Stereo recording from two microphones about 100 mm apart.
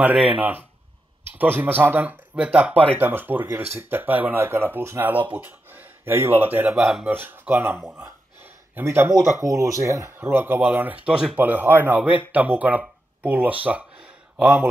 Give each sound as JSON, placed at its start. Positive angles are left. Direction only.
{"t": 0.0, "sound": "speech", "side_deg": -15}
{"t": 5.3, "sound": "a sound", "side_deg": -20}
{"t": 6.7, "sound": "speech", "side_deg": -5}
{"t": 7.1, "sound": "speech", "side_deg": -20}
{"t": 8.5, "sound": "a sound", "side_deg": -20}
{"t": 9.1, "sound": "speech", "side_deg": -30}